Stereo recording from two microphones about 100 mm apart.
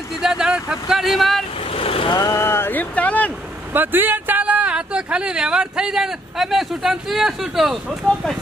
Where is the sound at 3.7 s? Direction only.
20° right (ahead or behind).